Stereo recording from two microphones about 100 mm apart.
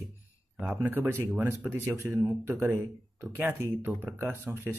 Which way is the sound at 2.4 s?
25° right (ahead or behind).